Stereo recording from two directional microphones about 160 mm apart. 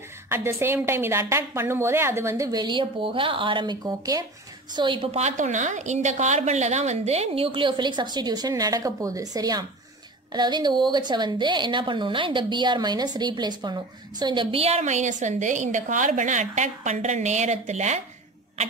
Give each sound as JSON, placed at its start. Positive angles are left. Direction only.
{"t": 0.3, "sound": "a woman's voice", "side_deg": -15}